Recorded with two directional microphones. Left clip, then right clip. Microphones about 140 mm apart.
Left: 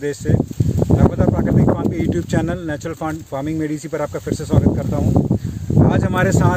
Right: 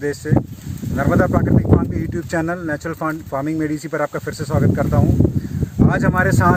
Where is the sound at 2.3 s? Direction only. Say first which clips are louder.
Right 1 dB; 20° left (ahead or behind).